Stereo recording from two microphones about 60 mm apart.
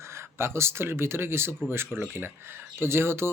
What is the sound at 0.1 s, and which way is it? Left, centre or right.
Speech, right.